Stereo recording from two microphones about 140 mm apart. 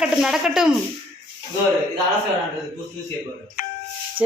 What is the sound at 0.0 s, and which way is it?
Speech, 5° right (ahead or behind).